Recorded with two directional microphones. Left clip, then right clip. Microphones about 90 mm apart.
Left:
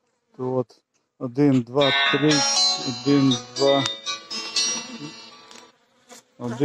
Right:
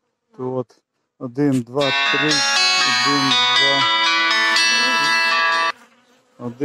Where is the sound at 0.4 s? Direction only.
30° right (ahead or behind).